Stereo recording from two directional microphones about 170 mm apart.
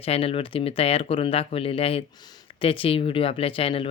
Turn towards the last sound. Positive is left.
turn(degrees=35)  # may be behind; listen again after turning